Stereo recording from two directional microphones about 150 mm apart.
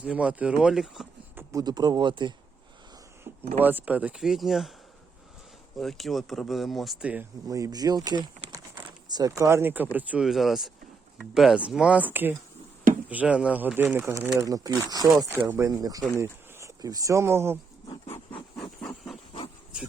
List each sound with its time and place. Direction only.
0.0 s speech: 10° right (ahead or behind)
1.4 s speech: 25° right (ahead or behind)
3.3 s a sound: 45° right (ahead or behind)
3.6 s speech: 10° right (ahead or behind)
5.8 s speech: centre (ahead or behind)
7.4 s speech: 25° right (ahead or behind)